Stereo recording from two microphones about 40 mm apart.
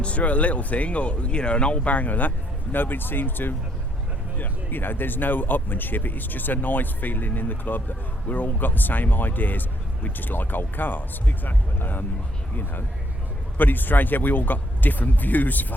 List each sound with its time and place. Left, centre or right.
0.0 s speech: left
2.7 s speech: left
13.6 s speech: left